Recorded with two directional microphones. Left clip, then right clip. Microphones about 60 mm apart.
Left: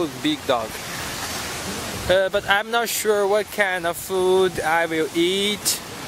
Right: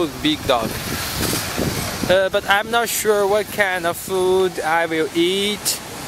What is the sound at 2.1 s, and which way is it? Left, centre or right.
Speech, centre.